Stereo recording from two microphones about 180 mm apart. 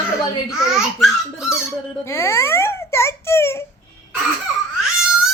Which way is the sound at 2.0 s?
15° left (ahead or behind).